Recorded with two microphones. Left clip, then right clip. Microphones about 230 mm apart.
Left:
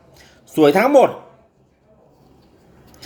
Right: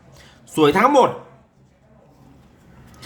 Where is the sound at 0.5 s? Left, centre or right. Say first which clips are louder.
Left 1 dB; centre.